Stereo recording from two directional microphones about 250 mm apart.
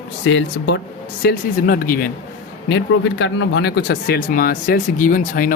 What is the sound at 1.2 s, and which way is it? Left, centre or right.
Speech, left.